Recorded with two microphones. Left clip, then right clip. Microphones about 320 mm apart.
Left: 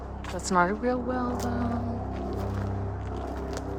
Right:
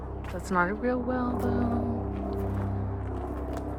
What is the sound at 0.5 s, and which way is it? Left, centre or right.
Music, centre.